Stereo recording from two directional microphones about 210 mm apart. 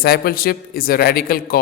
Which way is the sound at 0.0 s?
45° left (ahead or behind).